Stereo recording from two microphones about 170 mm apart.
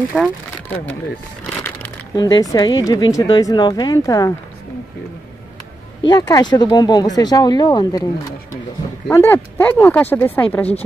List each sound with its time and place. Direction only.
0.1 s speech: 5° left (ahead or behind)
2.1 s speech: 20° left (ahead or behind)
6.0 s speech: 25° left (ahead or behind)
9.1 s speech: 10° left (ahead or behind)